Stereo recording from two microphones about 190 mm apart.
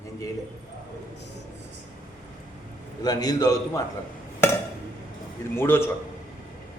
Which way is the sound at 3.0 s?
20° left (ahead or behind).